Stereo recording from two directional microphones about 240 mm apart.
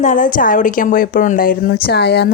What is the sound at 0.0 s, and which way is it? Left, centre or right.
A woman's voice, left.